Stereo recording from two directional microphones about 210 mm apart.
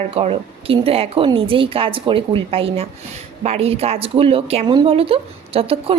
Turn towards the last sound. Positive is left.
turn(degrees=-25)  # may be behind; listen again after turning